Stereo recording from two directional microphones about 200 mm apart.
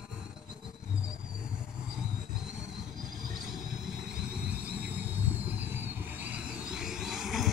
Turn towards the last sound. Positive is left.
turn(degrees=0)  # may be behind; listen again after turning